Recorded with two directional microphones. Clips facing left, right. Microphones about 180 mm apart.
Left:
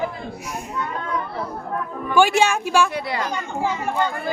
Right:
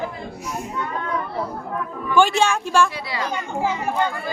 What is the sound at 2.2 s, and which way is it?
Speech, 10° left (ahead or behind).